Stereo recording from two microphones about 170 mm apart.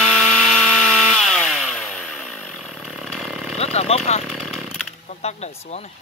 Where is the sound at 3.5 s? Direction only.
40° left (ahead or behind).